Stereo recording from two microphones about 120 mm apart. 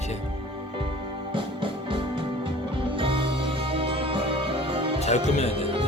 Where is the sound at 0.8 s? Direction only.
45° right (ahead or behind).